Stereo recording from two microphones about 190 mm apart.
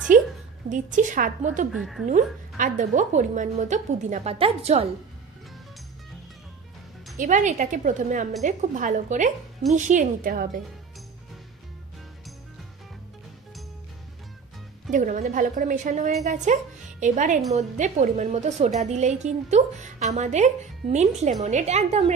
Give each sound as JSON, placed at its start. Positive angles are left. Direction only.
{"t": 0.1, "sound": "a sound", "side_deg": -45}
{"t": 0.9, "sound": "a woman's voice", "side_deg": -45}
{"t": 1.7, "sound": "speech", "side_deg": 0}
{"t": 2.0, "sound": "a woman's voice", "side_deg": -40}
{"t": 7.2, "sound": "a woman's voice", "side_deg": -40}
{"t": 14.9, "sound": "a woman's voice", "side_deg": -40}